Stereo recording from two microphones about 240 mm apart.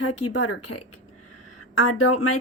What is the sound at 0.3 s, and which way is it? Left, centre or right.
Speech, left.